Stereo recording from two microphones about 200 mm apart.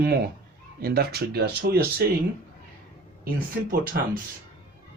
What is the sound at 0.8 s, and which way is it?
Speech, 50° right (ahead or behind).